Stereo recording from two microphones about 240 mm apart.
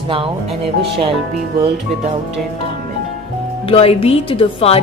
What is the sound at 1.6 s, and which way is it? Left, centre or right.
Speech, right.